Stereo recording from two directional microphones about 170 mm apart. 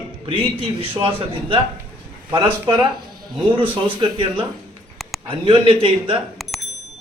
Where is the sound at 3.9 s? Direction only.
30° right (ahead or behind).